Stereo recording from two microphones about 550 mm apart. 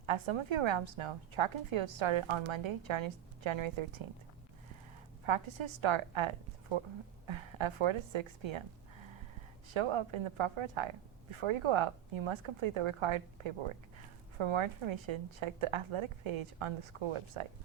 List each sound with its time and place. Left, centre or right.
0.0 s a woman's voice: right
5.2 s a woman's voice: right
9.7 s a woman's voice: right